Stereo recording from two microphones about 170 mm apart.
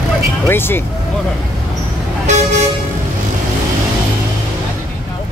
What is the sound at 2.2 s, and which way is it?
Vehicle, 45° right (ahead or behind).